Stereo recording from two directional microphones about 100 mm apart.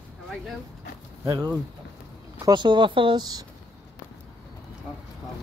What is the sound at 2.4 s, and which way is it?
Speech, 50° right (ahead or behind).